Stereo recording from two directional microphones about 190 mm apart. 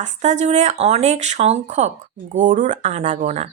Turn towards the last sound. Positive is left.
turn(degrees=-35)  # may be behind; listen again after turning